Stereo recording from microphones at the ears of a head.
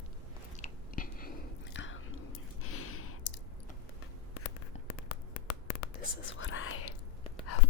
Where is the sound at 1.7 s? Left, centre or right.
Left.